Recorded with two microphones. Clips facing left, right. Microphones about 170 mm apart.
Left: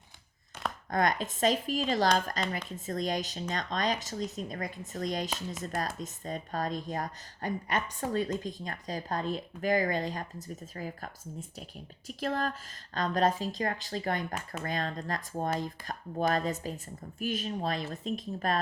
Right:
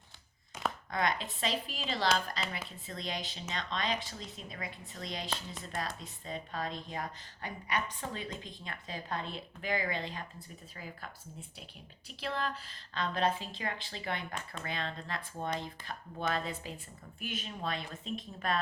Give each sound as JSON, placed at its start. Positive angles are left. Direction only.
{"t": 0.9, "sound": "a woman's voice", "side_deg": 45}